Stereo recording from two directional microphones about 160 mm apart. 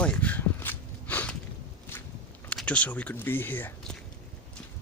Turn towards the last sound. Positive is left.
turn(degrees=10)  # may be behind; listen again after turning